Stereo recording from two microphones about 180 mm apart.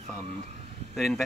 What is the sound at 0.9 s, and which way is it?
Speech, centre (ahead or behind).